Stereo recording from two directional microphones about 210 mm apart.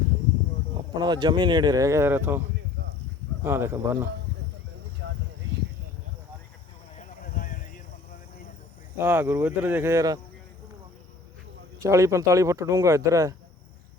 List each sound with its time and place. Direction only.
0.9 s speech: 20° right (ahead or behind)
3.4 s speech: 10° right (ahead or behind)
6.9 s a sound: 35° left (ahead or behind)
9.0 s speech: 10° right (ahead or behind)
11.8 s speech: 15° right (ahead or behind)